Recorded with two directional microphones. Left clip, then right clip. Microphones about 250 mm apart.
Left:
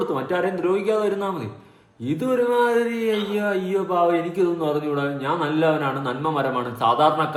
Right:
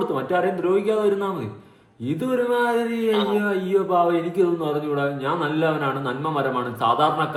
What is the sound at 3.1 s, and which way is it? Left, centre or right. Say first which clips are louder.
Speech: right 3 dB; right.